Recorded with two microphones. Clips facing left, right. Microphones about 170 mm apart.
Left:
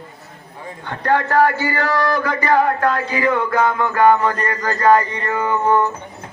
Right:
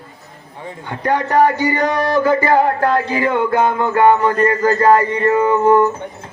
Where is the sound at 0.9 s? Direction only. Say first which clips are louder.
Even; 15° right (ahead or behind).